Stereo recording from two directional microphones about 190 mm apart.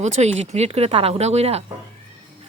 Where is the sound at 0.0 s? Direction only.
35° right (ahead or behind).